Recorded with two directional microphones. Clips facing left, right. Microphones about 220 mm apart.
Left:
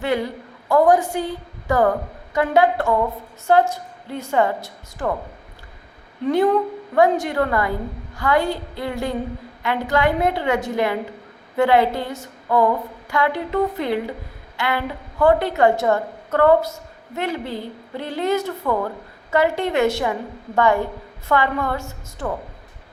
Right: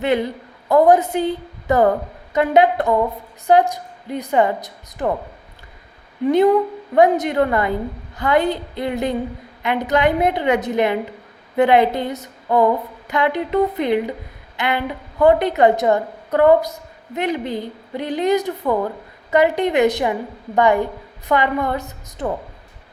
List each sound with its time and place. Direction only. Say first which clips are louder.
0.0 s a woman's voice: right 3 dB; 20° right (ahead or behind)
6.2 s a woman's voice: right 3 dB; 15° right (ahead or behind)